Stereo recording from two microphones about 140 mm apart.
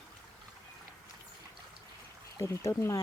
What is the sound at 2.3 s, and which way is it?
Speech, 20° left (ahead or behind).